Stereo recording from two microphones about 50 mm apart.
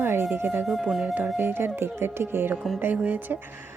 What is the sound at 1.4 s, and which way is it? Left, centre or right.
Speech, right.